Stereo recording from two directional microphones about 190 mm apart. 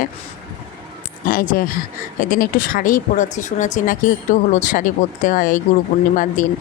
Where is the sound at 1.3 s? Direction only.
45° left (ahead or behind).